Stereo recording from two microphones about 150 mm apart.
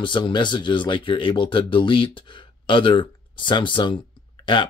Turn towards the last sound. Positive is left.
turn(degrees=35)  # may be behind; listen again after turning